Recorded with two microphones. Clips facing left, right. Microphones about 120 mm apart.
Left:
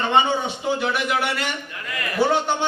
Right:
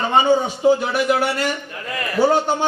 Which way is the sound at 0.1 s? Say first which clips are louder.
Right 5 dB; 40° right (ahead or behind).